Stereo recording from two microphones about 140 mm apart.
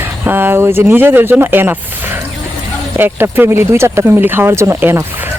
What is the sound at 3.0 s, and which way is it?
Speech, 15° right (ahead or behind).